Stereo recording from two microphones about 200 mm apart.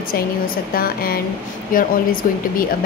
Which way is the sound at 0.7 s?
50° left (ahead or behind).